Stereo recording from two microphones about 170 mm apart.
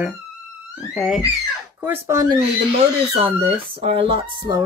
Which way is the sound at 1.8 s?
15° right (ahead or behind).